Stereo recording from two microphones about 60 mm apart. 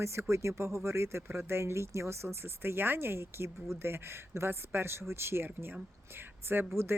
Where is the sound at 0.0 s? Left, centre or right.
Right.